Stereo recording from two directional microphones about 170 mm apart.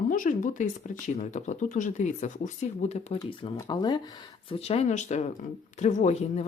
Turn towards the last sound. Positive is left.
turn(degrees=40)  # may be behind; listen again after turning